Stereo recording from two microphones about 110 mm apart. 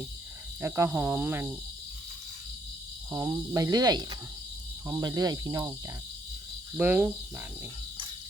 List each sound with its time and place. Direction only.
0.9 s speech: 15° right (ahead or behind)
3.1 s cricket: 30° right (ahead or behind)
6.7 s speech: 20° right (ahead or behind)